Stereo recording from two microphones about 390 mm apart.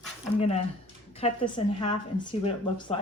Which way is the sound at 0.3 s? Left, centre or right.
Centre.